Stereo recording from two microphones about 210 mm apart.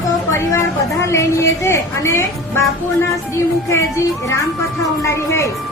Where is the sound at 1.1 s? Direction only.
15° left (ahead or behind).